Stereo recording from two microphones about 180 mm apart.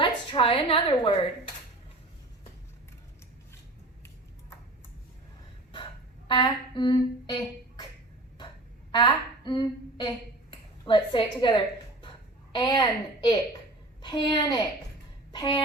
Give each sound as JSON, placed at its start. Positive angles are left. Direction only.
{"t": 0.0, "sound": "a woman's voice", "side_deg": 30}
{"t": 5.7, "sound": "a sound", "side_deg": 25}
{"t": 8.9, "sound": "a woman's voice", "side_deg": 25}